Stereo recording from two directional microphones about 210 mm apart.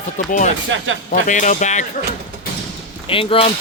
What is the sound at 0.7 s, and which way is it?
Speech, 65° right (ahead or behind).